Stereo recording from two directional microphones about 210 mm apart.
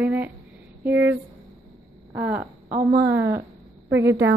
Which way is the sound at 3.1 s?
10° right (ahead or behind).